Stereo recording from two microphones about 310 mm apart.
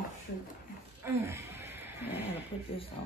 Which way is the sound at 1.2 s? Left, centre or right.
Centre.